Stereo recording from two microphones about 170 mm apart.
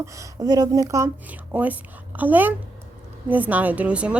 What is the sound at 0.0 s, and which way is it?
A woman's voice, 20° right (ahead or behind).